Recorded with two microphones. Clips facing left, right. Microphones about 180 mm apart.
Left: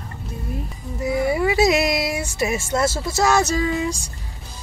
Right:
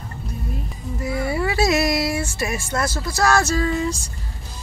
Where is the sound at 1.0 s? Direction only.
20° left (ahead or behind).